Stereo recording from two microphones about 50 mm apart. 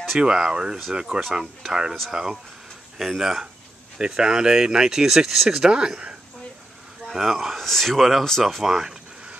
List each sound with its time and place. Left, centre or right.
0.2 s speech: centre
7.1 s speech: centre